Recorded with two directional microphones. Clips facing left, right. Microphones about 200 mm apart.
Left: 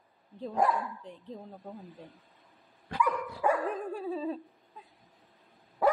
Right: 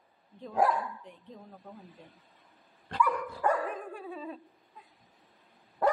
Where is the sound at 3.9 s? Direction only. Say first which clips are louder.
Left 7 dB; 30° left (ahead or behind).